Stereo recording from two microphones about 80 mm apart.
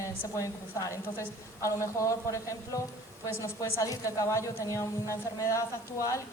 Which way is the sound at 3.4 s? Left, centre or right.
Left.